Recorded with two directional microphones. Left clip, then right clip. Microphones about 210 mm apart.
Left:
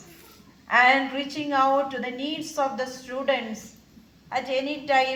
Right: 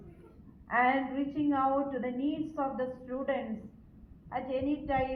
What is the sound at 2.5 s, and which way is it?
Speech, 15° left (ahead or behind).